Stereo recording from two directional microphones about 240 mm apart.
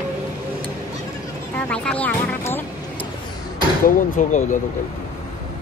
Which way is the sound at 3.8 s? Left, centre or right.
Left.